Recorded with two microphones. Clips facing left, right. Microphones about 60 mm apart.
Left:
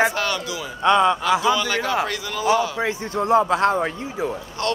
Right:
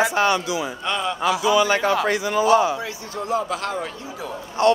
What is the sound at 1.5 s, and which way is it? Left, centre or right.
Speech, right.